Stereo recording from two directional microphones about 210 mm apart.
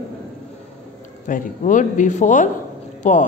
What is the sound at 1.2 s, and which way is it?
A woman's voice, 40° left (ahead or behind).